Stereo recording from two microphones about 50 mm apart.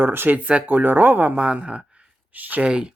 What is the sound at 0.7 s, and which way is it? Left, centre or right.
Speech, right.